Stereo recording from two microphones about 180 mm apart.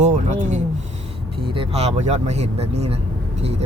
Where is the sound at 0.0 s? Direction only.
40° right (ahead or behind).